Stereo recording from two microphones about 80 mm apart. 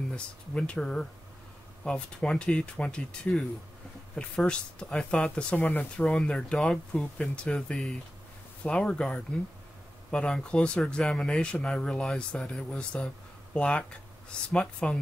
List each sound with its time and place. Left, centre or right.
0.1 s speech: centre